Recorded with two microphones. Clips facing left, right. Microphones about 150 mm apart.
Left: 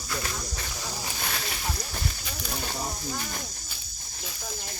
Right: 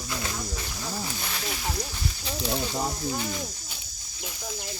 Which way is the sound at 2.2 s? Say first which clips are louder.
Right 7 dB; 25° right (ahead or behind).